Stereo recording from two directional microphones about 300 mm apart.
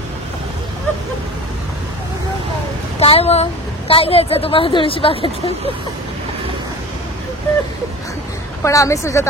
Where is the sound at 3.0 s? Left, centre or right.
Centre.